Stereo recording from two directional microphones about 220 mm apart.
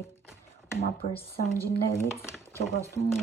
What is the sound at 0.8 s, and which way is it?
Speech, 25° left (ahead or behind).